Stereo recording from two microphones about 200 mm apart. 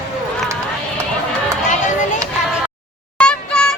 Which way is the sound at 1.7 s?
40° left (ahead or behind).